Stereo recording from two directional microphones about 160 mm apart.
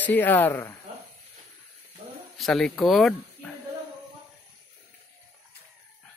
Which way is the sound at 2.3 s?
Centre (ahead or behind).